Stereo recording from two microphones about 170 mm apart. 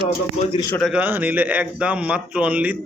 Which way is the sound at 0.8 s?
5° right (ahead or behind).